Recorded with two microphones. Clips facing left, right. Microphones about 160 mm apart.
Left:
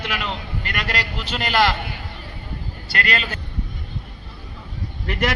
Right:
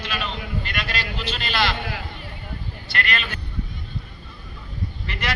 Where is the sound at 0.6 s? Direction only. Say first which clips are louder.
Left 3 dB; 45° left (ahead or behind).